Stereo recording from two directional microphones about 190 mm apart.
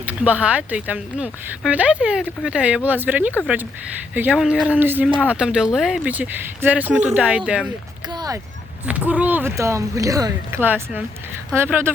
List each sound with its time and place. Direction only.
0.0 s speech: 10° right (ahead or behind)
8.1 s speech: 20° right (ahead or behind)
8.9 s speech: 5° right (ahead or behind)